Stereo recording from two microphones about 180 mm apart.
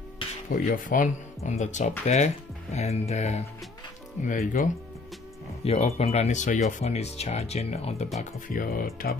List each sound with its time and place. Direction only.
0.5 s speech: 50° left (ahead or behind)
5.6 s speech: 35° left (ahead or behind)
8.2 s speech: 50° left (ahead or behind)